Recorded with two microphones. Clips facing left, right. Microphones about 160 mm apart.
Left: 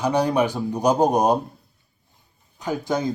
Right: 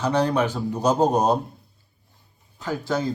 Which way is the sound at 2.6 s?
15° left (ahead or behind).